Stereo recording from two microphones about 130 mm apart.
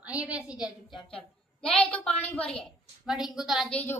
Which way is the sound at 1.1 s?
5° left (ahead or behind).